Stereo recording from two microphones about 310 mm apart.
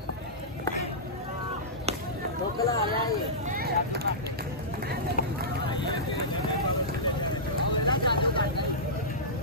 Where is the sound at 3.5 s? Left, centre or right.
Right.